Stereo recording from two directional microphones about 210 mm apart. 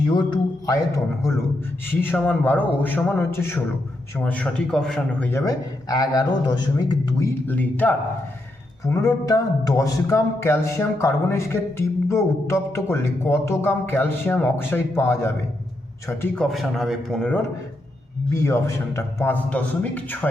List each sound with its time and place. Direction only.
0.3 s a man's voice: 15° left (ahead or behind)
18.4 s speech: 15° left (ahead or behind)